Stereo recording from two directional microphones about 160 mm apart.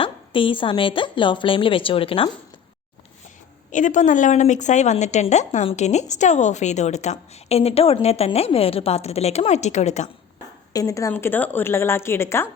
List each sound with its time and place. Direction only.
0.0 s a woman's voice: 30° left (ahead or behind)
3.7 s a woman's voice: 50° left (ahead or behind)
10.7 s a woman's voice: 20° left (ahead or behind)